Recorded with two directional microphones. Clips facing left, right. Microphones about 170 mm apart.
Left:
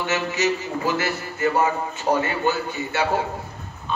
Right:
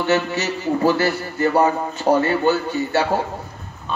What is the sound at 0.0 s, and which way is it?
A man's voice, 35° right (ahead or behind).